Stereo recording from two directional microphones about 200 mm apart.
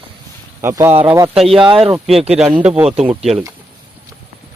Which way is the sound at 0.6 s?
15° right (ahead or behind).